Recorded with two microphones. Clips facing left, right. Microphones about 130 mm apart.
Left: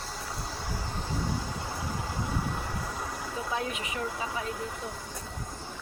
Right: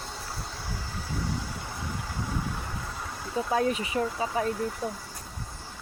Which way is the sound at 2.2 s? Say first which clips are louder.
Right 1 dB; 20° left (ahead or behind).